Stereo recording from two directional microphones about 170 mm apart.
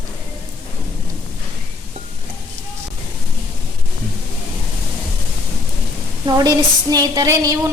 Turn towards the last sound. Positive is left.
turn(degrees=-20)  # may be behind; listen again after turning